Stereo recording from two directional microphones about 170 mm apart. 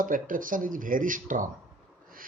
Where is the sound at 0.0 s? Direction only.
50° right (ahead or behind).